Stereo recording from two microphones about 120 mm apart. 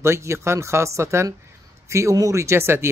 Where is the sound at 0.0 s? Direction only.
25° right (ahead or behind).